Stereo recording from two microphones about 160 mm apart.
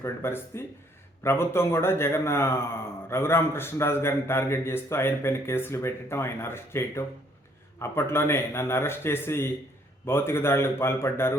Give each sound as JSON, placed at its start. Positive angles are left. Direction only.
{"t": 0.0, "sound": "a man's voice", "side_deg": 15}